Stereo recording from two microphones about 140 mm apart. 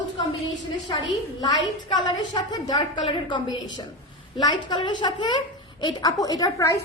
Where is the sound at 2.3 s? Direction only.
30° left (ahead or behind).